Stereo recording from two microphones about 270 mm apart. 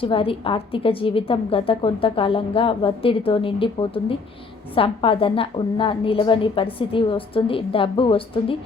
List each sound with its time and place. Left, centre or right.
0.0 s a woman's voice: centre